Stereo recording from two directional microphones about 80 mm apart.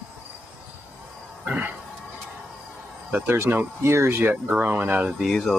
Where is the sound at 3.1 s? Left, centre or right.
Right.